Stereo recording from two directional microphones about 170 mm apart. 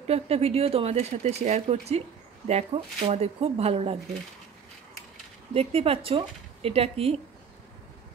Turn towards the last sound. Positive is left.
turn(degrees=-35)  # may be behind; listen again after turning